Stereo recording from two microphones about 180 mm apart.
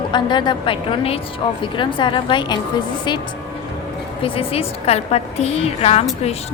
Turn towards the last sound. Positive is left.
turn(degrees=35)  # may be behind; listen again after turning